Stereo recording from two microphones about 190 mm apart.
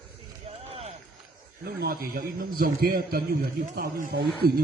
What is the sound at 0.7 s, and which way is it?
Rowboat, 30° right (ahead or behind).